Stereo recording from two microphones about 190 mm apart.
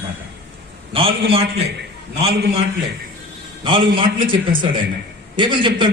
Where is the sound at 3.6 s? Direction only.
25° right (ahead or behind).